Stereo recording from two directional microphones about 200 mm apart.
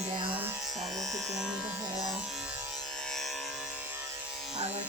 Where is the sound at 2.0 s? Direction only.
Centre (ahead or behind).